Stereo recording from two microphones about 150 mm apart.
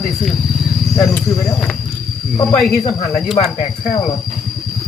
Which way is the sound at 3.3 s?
40° left (ahead or behind).